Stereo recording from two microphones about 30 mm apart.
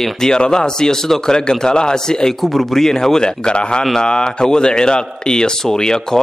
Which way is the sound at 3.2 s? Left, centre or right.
Left.